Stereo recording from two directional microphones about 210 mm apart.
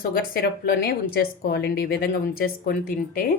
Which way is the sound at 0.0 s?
45° left (ahead or behind).